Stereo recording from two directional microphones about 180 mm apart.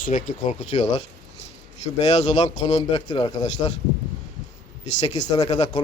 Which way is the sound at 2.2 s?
25° left (ahead or behind).